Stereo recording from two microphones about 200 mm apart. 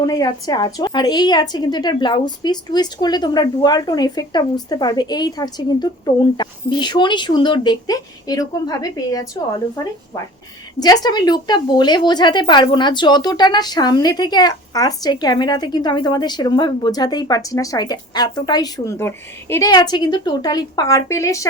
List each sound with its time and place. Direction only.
0.0 s speech: 20° left (ahead or behind)